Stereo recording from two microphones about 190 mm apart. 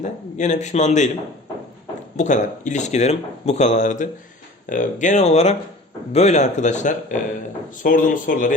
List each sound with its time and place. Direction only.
0.0 s speech: 40° left (ahead or behind)
2.1 s speech: 40° left (ahead or behind)